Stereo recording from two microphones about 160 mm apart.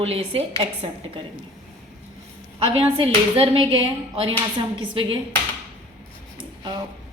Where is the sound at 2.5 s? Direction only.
40° right (ahead or behind).